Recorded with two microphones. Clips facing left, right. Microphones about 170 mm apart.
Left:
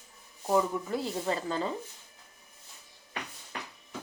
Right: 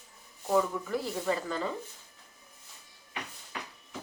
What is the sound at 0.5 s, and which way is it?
Speech, 30° left (ahead or behind).